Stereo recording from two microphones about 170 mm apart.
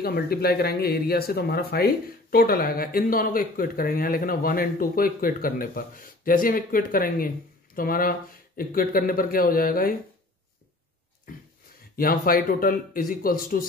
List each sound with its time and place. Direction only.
0.0 s speech: 65° left (ahead or behind)
11.3 s a sound: 55° left (ahead or behind)
12.0 s speech: 55° left (ahead or behind)